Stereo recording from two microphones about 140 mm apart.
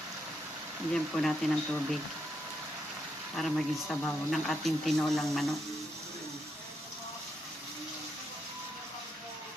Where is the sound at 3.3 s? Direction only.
Centre (ahead or behind).